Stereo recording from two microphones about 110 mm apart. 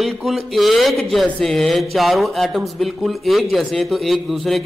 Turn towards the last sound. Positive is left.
turn(degrees=0)  # may be behind; listen again after turning